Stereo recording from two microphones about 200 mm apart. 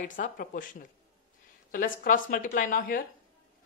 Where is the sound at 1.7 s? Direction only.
45° left (ahead or behind).